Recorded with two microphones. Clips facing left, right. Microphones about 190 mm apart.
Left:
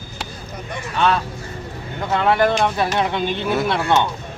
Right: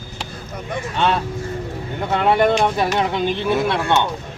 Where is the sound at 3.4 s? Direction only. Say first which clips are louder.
Left 1 dB; centre (ahead or behind).